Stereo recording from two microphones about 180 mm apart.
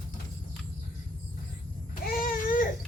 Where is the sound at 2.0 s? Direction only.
50° left (ahead or behind).